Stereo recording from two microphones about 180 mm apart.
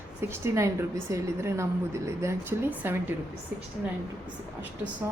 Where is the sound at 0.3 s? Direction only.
15° right (ahead or behind).